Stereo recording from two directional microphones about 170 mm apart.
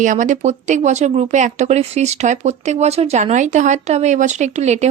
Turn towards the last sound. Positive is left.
turn(degrees=-40)  # may be behind; listen again after turning